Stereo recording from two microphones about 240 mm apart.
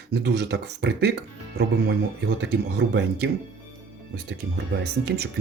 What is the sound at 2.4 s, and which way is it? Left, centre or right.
Speech, right.